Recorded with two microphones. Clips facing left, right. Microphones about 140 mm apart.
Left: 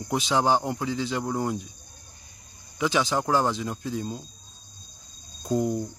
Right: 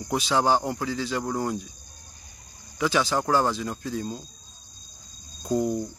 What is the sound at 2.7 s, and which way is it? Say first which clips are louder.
Speech: even; 20° left (ahead or behind).